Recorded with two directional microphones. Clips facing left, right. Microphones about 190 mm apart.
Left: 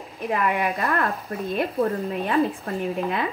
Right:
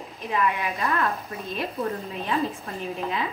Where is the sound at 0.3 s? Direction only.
55° left (ahead or behind).